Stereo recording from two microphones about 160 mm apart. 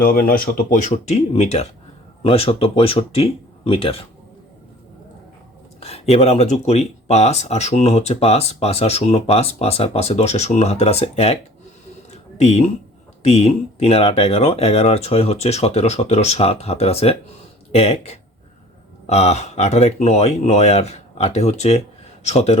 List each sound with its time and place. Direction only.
0.0 s speech: 65° left (ahead or behind); by 4.0 s 35° left (ahead or behind)
5.8 s speech: 40° left (ahead or behind)
12.1 s a sound: 45° left (ahead or behind)
13.2 s speech: 40° left (ahead or behind)